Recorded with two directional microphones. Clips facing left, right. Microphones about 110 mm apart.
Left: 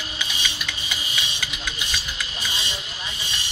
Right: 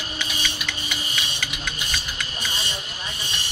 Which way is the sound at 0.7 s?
45° right (ahead or behind).